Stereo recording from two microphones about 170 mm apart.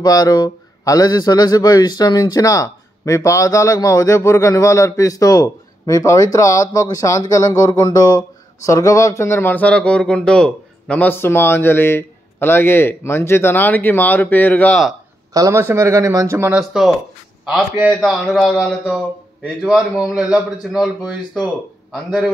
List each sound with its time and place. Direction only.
0.0 s a man's voice: 20° left (ahead or behind); by 15.0 s 5° left (ahead or behind)
15.3 s speech: 15° right (ahead or behind)
16.5 s a man's voice: 5° right (ahead or behind)
18.1 s a man's voice: 5° left (ahead or behind)